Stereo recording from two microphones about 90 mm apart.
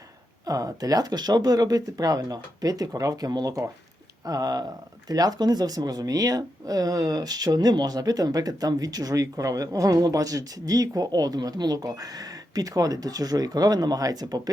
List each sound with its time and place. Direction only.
0.4 s speech: 45° right (ahead or behind)